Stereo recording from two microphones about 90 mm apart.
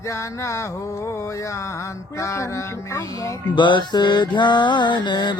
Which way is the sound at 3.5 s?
60° left (ahead or behind).